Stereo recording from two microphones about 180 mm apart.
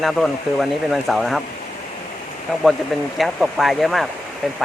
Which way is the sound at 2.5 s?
5° left (ahead or behind).